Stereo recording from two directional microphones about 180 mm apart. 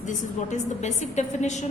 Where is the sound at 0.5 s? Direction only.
40° left (ahead or behind).